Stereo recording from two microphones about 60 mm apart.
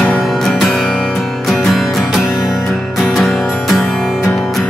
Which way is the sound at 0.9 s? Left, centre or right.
Centre.